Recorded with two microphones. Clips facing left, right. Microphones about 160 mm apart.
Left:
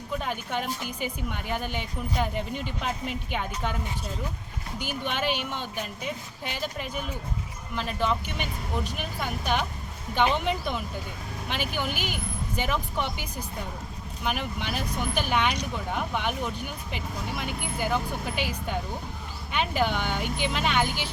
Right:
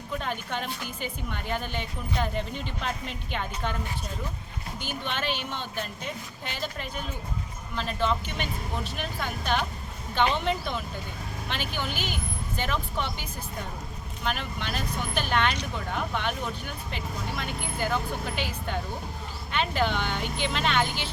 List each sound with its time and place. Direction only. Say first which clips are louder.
0.2 s speech: left 1 dB; 10° left (ahead or behind)
4.8 s speech: left 3 dB; 10° left (ahead or behind)
14.3 s speech: left 1 dB; 10° left (ahead or behind)
16.9 s speech: even; 10° left (ahead or behind)